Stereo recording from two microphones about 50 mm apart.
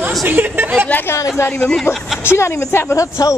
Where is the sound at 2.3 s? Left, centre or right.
Left.